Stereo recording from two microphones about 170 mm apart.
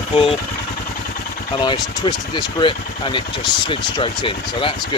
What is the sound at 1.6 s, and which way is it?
Speech, 25° left (ahead or behind).